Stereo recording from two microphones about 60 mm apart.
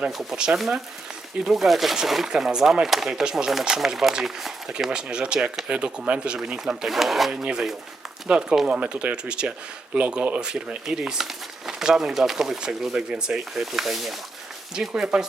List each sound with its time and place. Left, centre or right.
0.3 s speech: centre
1.5 s speech: centre
6.8 s speech: centre
8.3 s speech: centre
14.8 s speech: centre